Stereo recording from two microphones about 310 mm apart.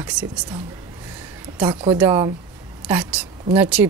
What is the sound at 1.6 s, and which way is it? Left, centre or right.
Speech, centre.